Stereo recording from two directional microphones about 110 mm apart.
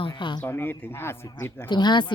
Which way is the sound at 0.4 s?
20° left (ahead or behind).